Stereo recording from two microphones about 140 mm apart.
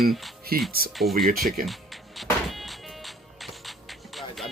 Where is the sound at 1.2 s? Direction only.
90° right.